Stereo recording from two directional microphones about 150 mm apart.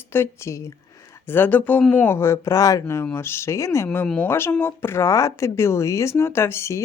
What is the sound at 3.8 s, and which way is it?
Speech, 5° left (ahead or behind).